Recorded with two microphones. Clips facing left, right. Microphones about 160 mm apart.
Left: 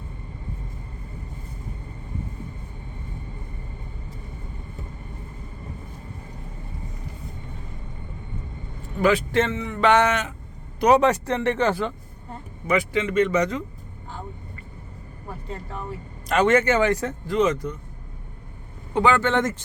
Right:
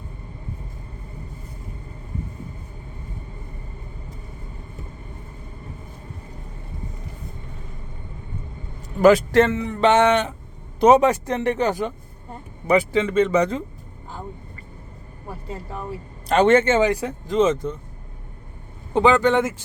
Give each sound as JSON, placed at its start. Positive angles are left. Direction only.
{"t": 9.0, "sound": "a man's voice", "side_deg": -45}
{"t": 12.6, "sound": "a man's voice", "side_deg": -30}
{"t": 16.3, "sound": "speech", "side_deg": -30}
{"t": 16.9, "sound": "speech", "side_deg": -10}
{"t": 17.3, "sound": "speech", "side_deg": -25}
{"t": 18.9, "sound": "speech", "side_deg": -20}